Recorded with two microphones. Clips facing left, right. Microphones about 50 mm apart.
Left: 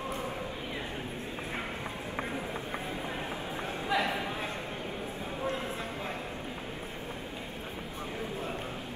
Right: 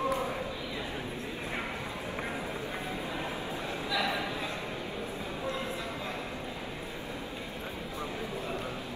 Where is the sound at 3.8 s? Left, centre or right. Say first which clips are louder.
Left 2 dB; left.